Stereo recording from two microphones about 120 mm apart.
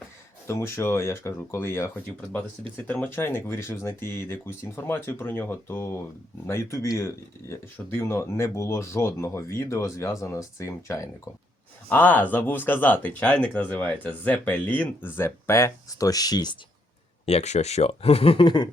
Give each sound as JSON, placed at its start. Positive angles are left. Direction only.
{"t": 0.4, "sound": "speech", "side_deg": 20}
{"t": 11.9, "sound": "speech", "side_deg": 15}
{"t": 17.2, "sound": "speech", "side_deg": 65}